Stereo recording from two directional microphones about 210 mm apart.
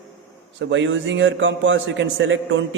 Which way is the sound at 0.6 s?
60° right (ahead or behind).